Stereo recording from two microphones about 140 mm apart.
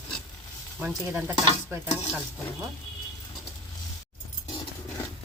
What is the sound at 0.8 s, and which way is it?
Stir, 15° right (ahead or behind).